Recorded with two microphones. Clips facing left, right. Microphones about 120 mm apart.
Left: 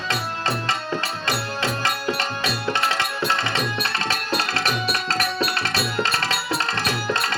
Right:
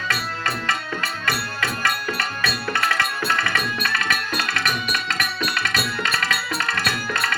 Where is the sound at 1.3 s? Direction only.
25° left (ahead or behind).